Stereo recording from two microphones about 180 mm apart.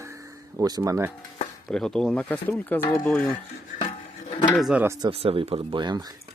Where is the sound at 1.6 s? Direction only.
5° left (ahead or behind).